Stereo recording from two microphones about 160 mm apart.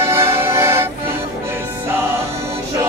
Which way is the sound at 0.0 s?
15° right (ahead or behind).